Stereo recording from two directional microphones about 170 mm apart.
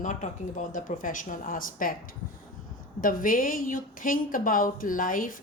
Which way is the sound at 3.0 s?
55° left (ahead or behind).